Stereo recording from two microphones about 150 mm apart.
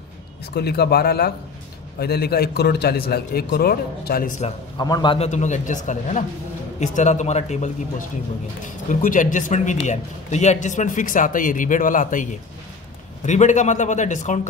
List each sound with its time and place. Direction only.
0.6 s a man's voice: 90° left; by 4.5 s 60° left (ahead or behind)
4.7 s a man's voice: 25° left (ahead or behind)
5.1 s a man's voice: 45° left (ahead or behind)
8.6 s a man's voice: 60° left (ahead or behind)